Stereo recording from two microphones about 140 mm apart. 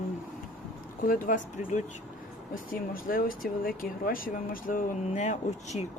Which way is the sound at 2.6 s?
90° left.